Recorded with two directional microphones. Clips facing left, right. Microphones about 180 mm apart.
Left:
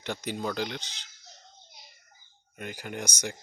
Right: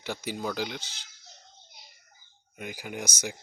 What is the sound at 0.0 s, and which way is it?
Speech, 5° right (ahead or behind).